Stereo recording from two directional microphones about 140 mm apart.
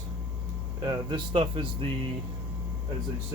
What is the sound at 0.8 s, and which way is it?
Speech, 30° right (ahead or behind).